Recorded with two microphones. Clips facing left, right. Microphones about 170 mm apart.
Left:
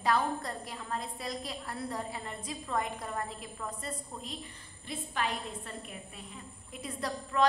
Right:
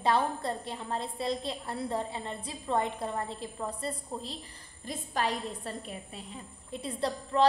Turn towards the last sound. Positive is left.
turn(degrees=-30)  # may be behind; listen again after turning